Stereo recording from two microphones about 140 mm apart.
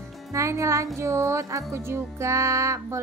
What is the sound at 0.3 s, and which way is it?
A woman's voice, 20° right (ahead or behind).